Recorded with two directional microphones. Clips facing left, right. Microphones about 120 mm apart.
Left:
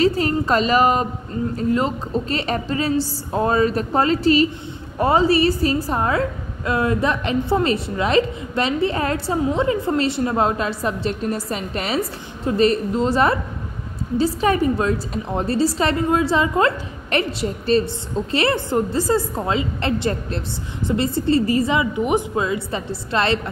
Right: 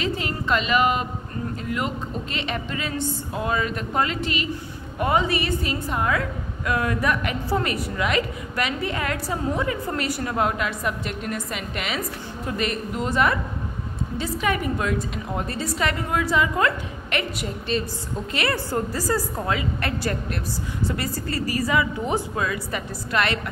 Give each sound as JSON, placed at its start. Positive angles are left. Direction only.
{"t": 0.0, "sound": "a woman's voice", "side_deg": 40}